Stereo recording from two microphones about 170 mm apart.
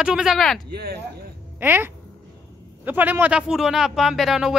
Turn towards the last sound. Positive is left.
turn(degrees=-5)  # may be behind; listen again after turning